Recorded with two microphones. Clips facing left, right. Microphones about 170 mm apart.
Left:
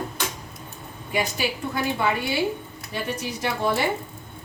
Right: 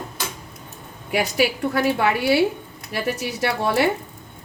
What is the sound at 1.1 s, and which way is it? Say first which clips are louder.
A woman's voice: right 5 dB; 75° right (ahead or behind).